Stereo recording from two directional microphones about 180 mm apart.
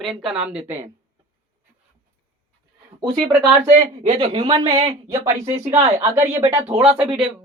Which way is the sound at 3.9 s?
40° right (ahead or behind).